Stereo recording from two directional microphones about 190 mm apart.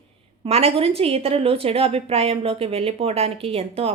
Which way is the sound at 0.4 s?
35° right (ahead or behind).